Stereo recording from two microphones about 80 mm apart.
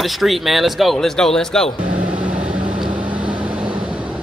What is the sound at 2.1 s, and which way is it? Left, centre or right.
Vehicle, centre.